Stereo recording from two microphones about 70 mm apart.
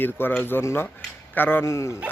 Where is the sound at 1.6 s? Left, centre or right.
Left.